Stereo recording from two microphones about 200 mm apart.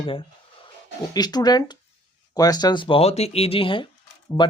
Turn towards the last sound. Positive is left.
turn(degrees=25)  # may be behind; listen again after turning